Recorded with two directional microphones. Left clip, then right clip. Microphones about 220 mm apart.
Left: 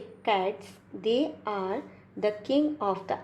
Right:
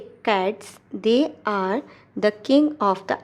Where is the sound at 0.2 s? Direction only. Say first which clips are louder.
Right 5 dB; 30° right (ahead or behind).